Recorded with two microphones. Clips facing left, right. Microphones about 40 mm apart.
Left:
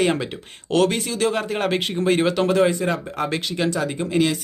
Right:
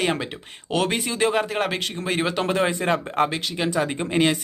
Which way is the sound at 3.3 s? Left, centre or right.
Centre.